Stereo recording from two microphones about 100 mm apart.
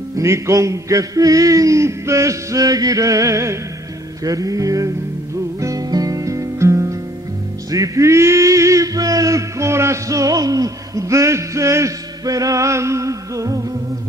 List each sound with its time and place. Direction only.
0.2 s male singing: 30° right (ahead or behind)
5.6 s music: 35° right (ahead or behind)
7.7 s male singing: 35° right (ahead or behind)